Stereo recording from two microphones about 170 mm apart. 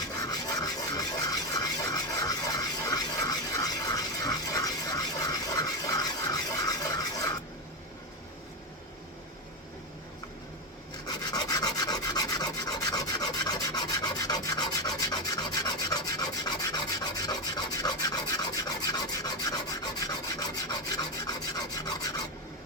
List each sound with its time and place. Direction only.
0.2 s rub: 20° left (ahead or behind)
11.0 s rub: 25° left (ahead or behind)